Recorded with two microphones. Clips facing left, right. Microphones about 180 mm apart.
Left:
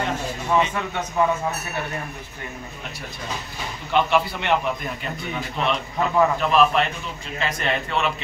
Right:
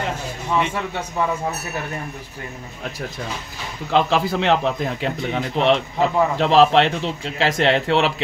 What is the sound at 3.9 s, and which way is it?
A man's voice, 90° right.